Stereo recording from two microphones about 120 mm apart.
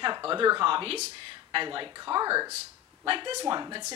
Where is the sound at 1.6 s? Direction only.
40° right (ahead or behind).